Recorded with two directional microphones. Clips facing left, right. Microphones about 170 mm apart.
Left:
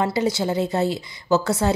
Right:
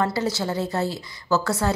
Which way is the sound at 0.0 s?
15° left (ahead or behind).